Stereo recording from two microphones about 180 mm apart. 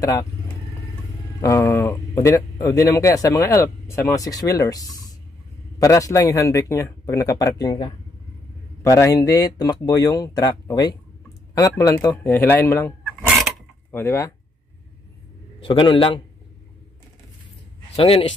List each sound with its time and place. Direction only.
0.0 s speech: 20° left (ahead or behind)
1.4 s speech: 15° left (ahead or behind)
13.9 s speech: 15° left (ahead or behind)
15.6 s speech: 30° left (ahead or behind)
17.9 s speech: 30° left (ahead or behind)